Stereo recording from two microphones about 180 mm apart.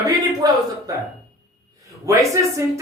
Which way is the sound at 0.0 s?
20° right (ahead or behind).